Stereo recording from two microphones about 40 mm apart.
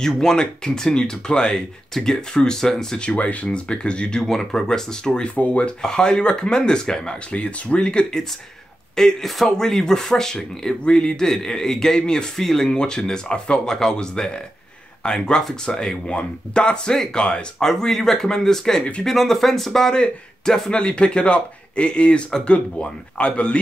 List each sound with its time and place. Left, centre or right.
0.0 s speech: centre
3.2 s speech: left
3.4 s speech: left
4.2 s speech: centre
5.3 s speech: left
5.8 s speech: centre
7.2 s speech: left
8.9 s speech: centre
12.4 s speech: centre
12.6 s speech: centre
17.6 s speech: centre
18.8 s speech: left
19.0 s speech: centre
20.7 s speech: left